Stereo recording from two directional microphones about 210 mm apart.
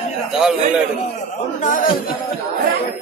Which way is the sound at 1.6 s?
40° left (ahead or behind).